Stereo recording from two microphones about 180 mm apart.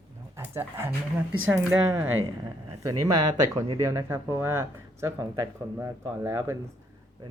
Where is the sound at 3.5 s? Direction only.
15° right (ahead or behind).